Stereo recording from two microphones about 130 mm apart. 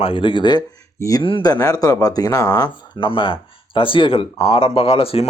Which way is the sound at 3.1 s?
40° left (ahead or behind).